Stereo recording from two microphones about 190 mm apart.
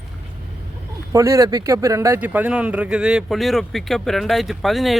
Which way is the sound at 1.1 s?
15° right (ahead or behind).